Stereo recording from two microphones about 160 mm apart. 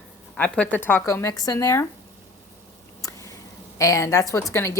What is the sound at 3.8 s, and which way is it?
Speech, 20° left (ahead or behind).